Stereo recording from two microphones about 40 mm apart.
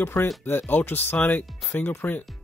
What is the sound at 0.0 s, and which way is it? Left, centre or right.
Speech, left.